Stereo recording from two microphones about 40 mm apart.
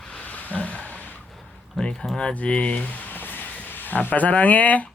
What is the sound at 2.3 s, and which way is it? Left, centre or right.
Speech, left.